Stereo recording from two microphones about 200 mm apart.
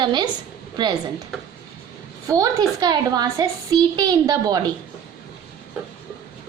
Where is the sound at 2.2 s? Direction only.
15° right (ahead or behind).